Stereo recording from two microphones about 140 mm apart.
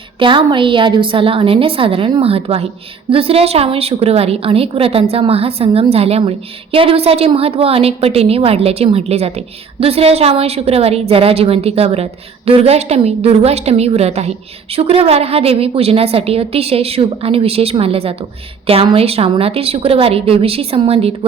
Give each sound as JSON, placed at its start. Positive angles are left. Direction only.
{"t": 0.2, "sound": "a woman's voice", "side_deg": -35}